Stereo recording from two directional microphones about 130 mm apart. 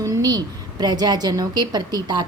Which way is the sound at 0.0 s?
25° right (ahead or behind).